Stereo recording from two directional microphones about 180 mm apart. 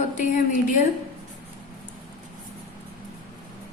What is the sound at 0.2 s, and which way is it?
Speech, 45° left (ahead or behind).